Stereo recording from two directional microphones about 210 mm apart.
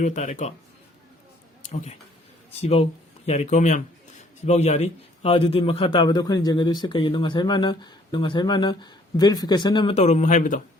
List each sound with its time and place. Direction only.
0.0 s speech: 35° left (ahead or behind)
1.7 s a man's voice: 30° left (ahead or behind)